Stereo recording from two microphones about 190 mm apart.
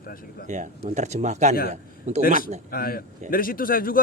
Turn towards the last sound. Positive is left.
turn(degrees=50)  # may be behind; listen again after turning